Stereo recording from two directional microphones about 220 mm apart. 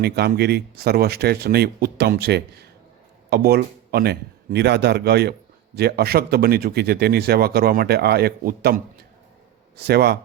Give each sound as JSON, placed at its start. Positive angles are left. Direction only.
{"t": 0.0, "sound": "a man's voice", "side_deg": -45}